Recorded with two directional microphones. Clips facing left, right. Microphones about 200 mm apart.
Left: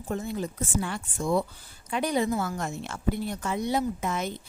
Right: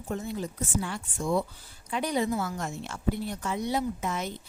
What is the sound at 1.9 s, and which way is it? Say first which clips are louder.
A woman's voice: left 2 dB; 55° left (ahead or behind).